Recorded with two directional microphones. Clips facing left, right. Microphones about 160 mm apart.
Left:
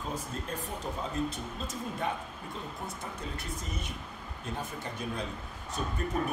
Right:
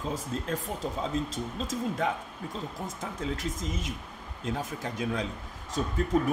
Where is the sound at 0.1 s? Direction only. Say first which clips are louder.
Right 4 dB; 90° right.